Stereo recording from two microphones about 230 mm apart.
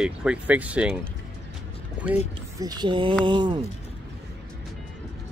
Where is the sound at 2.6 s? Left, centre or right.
Centre.